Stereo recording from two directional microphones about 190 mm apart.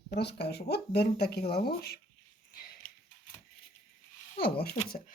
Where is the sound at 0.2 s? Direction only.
60° left (ahead or behind).